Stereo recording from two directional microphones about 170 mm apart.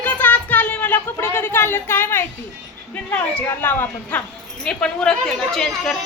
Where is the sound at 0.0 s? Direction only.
10° left (ahead or behind).